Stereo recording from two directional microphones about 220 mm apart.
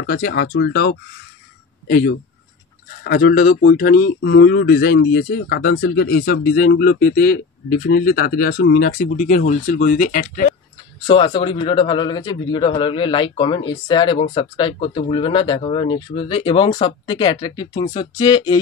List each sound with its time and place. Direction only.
0.0 s speech: 45° left (ahead or behind)
11.1 s speech: 20° left (ahead or behind)